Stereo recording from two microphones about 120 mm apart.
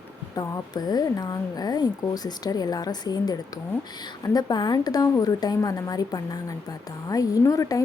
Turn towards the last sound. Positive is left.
turn(degrees=30)  # may be behind; listen again after turning